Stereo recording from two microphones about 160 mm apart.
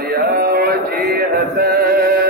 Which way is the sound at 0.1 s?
70° right (ahead or behind).